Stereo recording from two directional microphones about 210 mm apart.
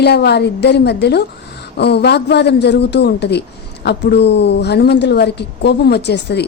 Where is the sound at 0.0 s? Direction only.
50° left (ahead or behind).